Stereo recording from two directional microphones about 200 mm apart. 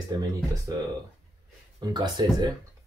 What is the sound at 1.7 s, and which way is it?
Speech, 20° right (ahead or behind).